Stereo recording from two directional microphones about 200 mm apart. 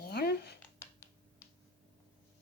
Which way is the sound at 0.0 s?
50° left (ahead or behind).